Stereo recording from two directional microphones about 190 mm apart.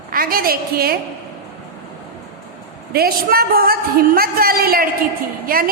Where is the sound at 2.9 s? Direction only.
55° right (ahead or behind).